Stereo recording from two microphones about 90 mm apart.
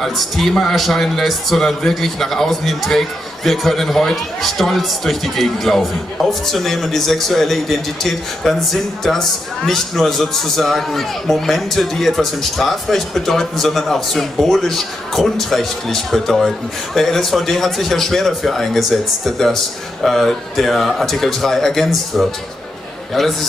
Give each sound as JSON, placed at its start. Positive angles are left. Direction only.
{"t": 0.0, "sound": "speech", "side_deg": 0}